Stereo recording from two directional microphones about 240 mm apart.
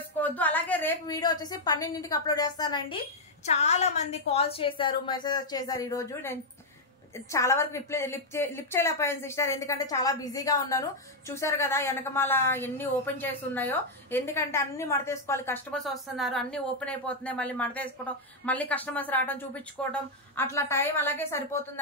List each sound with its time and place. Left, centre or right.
0.2 s a woman's voice: centre
3.4 s a woman's voice: left; by 21.5 s centre